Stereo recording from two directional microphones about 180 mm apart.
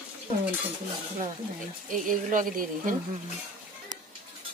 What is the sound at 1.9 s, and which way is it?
A woman's voice, 50° right (ahead or behind).